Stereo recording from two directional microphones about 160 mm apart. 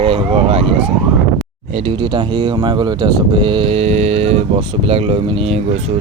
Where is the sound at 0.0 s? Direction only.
30° right (ahead or behind).